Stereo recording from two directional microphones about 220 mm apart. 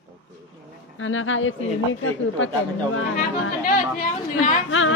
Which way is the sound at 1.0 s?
60° left (ahead or behind).